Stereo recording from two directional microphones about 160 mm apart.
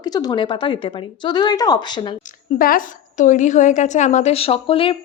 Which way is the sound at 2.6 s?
60° left (ahead or behind).